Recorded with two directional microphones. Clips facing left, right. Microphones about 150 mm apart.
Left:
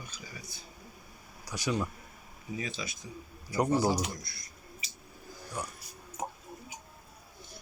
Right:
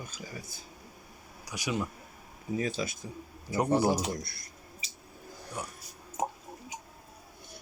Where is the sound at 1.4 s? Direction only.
15° right (ahead or behind).